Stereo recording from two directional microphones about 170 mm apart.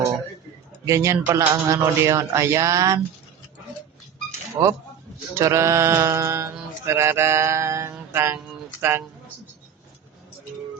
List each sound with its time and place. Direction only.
0.9 s a man's voice: 15° right (ahead or behind)
4.6 s a man's voice: 20° right (ahead or behind)
5.3 s a sound: 15° right (ahead or behind)